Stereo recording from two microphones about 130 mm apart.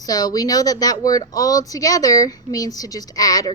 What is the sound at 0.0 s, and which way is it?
Speech, 30° left (ahead or behind).